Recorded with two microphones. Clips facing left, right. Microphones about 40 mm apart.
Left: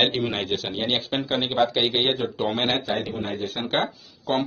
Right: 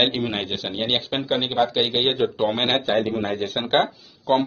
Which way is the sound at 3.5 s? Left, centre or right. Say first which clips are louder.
Right 6 dB; right.